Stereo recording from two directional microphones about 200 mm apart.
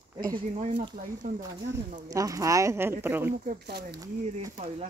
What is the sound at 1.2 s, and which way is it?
Speech, 45° right (ahead or behind).